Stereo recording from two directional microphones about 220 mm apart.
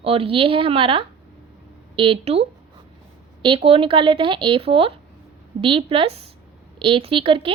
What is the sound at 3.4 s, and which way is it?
A woman's voice, 25° right (ahead or behind).